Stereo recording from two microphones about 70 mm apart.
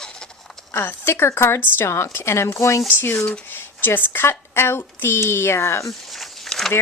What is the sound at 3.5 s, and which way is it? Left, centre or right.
A woman's voice, left.